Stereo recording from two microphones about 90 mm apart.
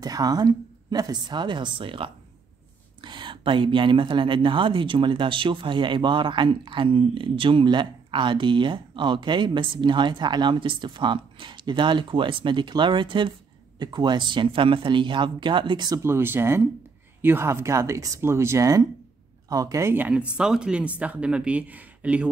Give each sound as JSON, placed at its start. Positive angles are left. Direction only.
{"t": 0.0, "sound": "a woman's voice", "side_deg": -45}
{"t": 13.7, "sound": "speech", "side_deg": -55}
{"t": 16.0, "sound": "speech", "side_deg": -25}
{"t": 20.0, "sound": "speech", "side_deg": -15}